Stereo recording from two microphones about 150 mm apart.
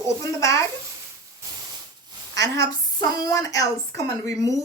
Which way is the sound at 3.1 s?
25° left (ahead or behind).